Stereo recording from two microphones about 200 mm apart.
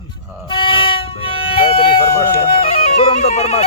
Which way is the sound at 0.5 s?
25° left (ahead or behind).